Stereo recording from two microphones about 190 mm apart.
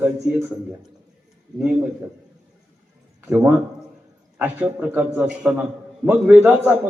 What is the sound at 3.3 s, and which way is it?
A man's voice, 10° right (ahead or behind).